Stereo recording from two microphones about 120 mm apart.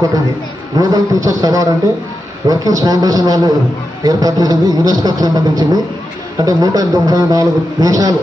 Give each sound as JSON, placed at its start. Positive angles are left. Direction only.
{"t": 0.7, "sound": "a man's voice", "side_deg": -30}